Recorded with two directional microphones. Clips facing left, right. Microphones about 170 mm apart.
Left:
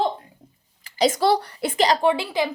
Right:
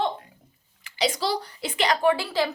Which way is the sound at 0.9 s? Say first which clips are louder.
Left 7 dB; 45° left (ahead or behind).